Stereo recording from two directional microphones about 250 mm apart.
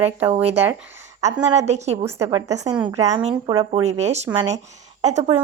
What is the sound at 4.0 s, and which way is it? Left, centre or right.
Speech, right.